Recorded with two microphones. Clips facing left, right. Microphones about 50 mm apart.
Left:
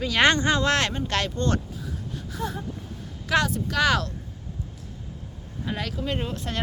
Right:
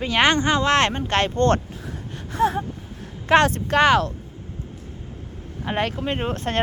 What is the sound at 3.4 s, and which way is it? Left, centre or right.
Speech, right.